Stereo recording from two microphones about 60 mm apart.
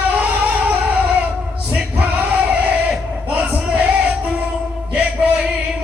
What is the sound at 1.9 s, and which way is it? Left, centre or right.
Music, right.